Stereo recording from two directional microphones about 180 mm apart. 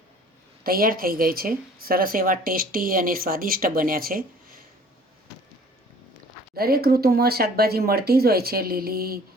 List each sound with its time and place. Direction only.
0.6 s a woman's voice: 55° right (ahead or behind)
6.6 s speech: 60° right (ahead or behind)